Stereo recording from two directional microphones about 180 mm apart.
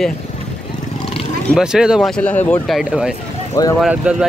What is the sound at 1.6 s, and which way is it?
Speech, 5° right (ahead or behind).